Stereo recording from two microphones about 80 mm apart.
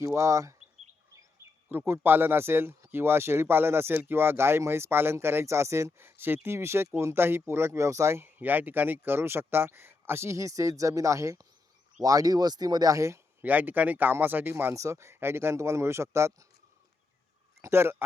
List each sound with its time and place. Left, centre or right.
0.0 s speech: right
1.7 s speech: right
8.4 s speech: right
13.4 s speech: right
14.7 s speech: right
17.6 s speech: right